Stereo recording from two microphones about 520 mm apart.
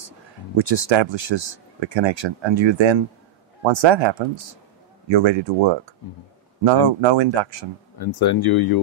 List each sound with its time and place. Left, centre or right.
0.6 s speech: right
8.0 s speech: left